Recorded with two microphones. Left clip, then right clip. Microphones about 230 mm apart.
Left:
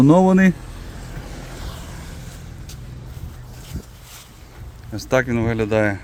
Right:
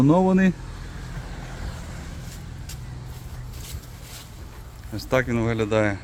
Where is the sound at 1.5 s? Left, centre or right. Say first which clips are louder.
Left 3 dB; left.